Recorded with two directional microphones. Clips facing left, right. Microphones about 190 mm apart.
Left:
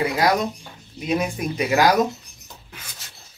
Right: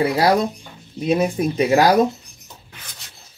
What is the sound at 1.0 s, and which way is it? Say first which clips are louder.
Speech: right 5 dB; 30° right (ahead or behind).